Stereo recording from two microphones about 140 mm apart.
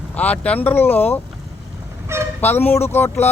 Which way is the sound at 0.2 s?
10° left (ahead or behind).